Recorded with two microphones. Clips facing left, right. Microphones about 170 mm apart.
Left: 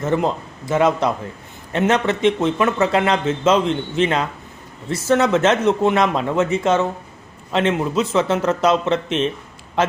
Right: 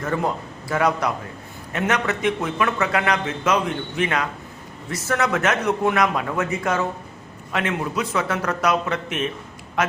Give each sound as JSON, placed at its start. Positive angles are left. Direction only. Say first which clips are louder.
{"t": 0.0, "sound": "a man's voice", "louder": "left 4 dB", "side_deg": 20}